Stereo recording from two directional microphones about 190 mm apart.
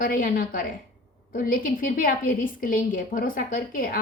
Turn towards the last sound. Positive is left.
turn(degrees=50)  # may be behind; listen again after turning